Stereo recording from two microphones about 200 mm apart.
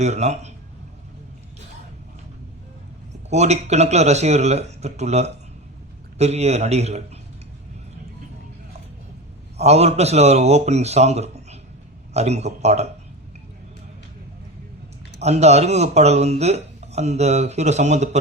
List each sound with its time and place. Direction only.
0.0 s speech: 35° right (ahead or behind)
3.2 s speech: 35° right (ahead or behind)
9.6 s speech: 30° right (ahead or behind)
15.2 s speech: 35° right (ahead or behind)